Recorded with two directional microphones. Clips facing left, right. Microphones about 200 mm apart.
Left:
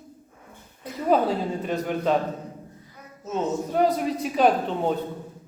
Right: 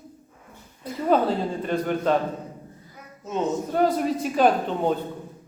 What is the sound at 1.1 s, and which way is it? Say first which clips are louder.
A man's voice: even; centre (ahead or behind).